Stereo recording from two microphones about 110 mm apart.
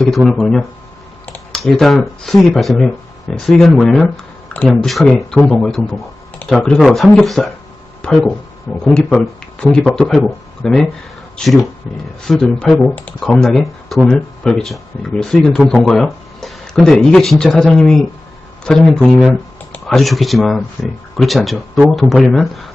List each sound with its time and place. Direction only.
0.1 s speech: 5° left (ahead or behind)
12.9 s speech: 15° left (ahead or behind)
13.1 s speech: 5° left (ahead or behind)